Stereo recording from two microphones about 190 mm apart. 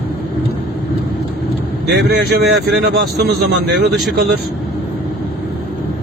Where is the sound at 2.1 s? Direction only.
55° right (ahead or behind).